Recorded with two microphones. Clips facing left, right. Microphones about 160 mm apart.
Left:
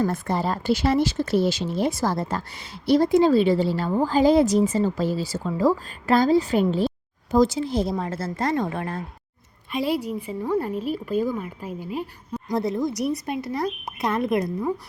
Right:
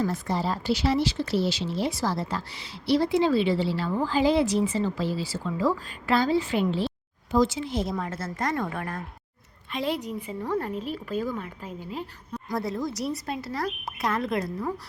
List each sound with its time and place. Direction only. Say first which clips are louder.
0.0 s speech: left 3 dB; 55° left (ahead or behind); by 9.0 s 30° left (ahead or behind)
9.7 s a woman's voice: left 4 dB; 10° left (ahead or behind)